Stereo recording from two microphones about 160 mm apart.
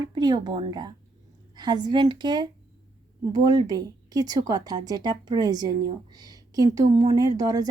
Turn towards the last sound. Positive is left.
turn(degrees=-25)  # may be behind; listen again after turning